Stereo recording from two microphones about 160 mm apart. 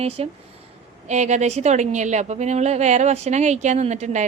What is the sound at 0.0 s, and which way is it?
A woman's voice, 40° right (ahead or behind).